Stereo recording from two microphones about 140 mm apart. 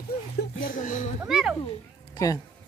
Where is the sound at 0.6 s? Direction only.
75° left (ahead or behind).